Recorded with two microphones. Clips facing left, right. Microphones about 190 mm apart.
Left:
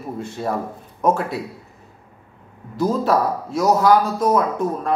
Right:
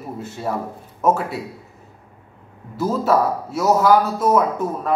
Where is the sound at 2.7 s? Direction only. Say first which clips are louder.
Even; 5° right (ahead or behind).